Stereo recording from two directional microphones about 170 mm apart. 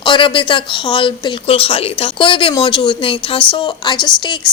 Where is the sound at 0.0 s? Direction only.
30° left (ahead or behind).